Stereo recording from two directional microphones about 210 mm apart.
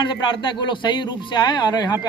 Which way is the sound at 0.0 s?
20° left (ahead or behind).